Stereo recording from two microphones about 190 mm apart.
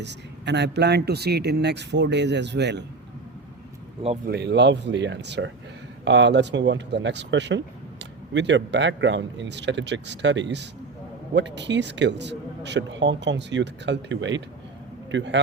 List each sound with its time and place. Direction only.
0.0 s speech: 65° right (ahead or behind)
4.3 s a man's voice: 65° right (ahead or behind)